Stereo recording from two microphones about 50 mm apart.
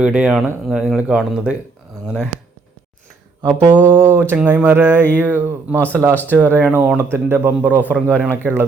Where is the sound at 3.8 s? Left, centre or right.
Right.